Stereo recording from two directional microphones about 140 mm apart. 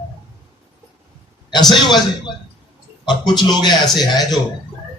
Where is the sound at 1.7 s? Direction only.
30° left (ahead or behind).